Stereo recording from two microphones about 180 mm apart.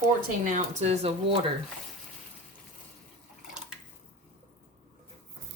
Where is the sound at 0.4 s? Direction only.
45° right (ahead or behind).